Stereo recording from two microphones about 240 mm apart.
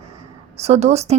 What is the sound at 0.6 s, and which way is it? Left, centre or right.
Speech, right.